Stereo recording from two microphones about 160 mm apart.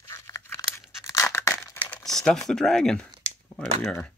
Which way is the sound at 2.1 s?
5° left (ahead or behind).